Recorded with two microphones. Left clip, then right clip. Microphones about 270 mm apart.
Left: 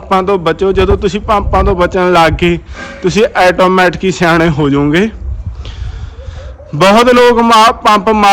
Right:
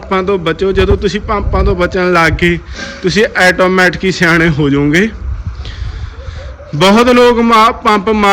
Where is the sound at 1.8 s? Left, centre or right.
Left.